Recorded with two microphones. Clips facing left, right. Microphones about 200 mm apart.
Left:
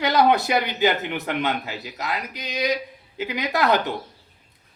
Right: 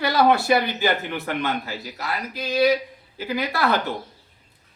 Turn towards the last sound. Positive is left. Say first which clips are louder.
# left 1 dB
turn(degrees=20)  # may be behind; listen again after turning